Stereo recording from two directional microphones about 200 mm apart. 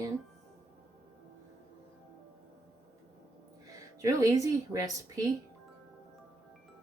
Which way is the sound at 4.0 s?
15° right (ahead or behind).